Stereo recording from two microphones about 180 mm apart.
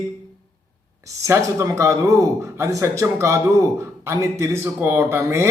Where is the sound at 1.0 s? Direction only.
15° right (ahead or behind).